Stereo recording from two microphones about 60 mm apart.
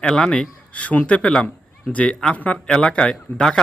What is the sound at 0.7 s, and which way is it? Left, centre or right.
A man's voice, left.